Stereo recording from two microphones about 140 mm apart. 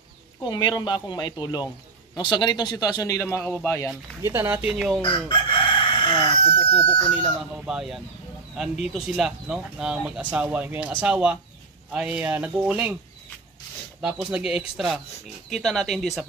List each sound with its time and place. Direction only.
0.4 s a man's voice: 30° left (ahead or behind)
4.2 s speech: 15° right (ahead or behind)
4.7 s speech: centre (ahead or behind)
5.0 s chicken: 35° left (ahead or behind)
7.6 s speech: 5° right (ahead or behind)
14.0 s speech: 5° right (ahead or behind)